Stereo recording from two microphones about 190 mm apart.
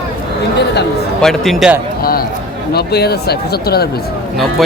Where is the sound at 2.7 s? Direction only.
55° left (ahead or behind).